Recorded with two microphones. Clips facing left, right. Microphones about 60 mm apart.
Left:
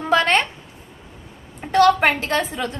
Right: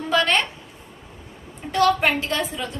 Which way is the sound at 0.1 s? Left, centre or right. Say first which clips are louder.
Left 3 dB; left.